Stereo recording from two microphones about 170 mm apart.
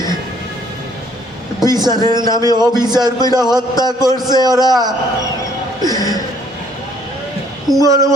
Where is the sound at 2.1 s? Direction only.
25° right (ahead or behind).